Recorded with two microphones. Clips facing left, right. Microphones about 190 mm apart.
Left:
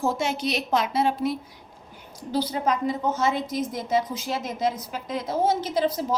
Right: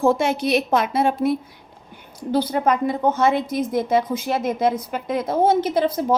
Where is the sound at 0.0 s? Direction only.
55° right (ahead or behind).